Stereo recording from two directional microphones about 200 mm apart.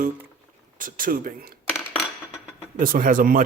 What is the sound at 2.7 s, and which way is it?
Speech, 45° right (ahead or behind).